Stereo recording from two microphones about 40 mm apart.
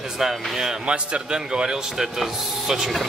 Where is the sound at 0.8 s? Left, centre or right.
Right; by 2.9 s centre.